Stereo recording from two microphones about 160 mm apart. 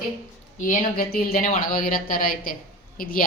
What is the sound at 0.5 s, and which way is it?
A woman's voice, 55° left (ahead or behind).